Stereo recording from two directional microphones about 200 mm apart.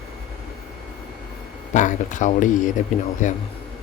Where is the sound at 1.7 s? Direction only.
40° left (ahead or behind).